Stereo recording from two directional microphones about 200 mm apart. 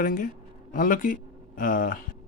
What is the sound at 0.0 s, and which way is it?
Speech, 40° left (ahead or behind).